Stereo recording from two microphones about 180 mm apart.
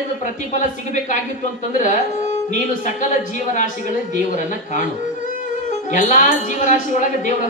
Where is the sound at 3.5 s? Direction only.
45° left (ahead or behind).